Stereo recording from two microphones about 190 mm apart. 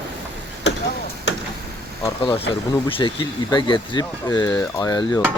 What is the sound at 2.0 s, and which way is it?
Speech, 25° left (ahead or behind).